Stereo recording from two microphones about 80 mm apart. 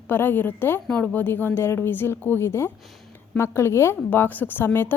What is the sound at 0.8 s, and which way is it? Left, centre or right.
A woman's voice, centre.